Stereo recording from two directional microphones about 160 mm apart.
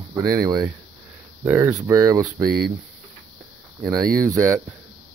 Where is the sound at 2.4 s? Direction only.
75° right (ahead or behind).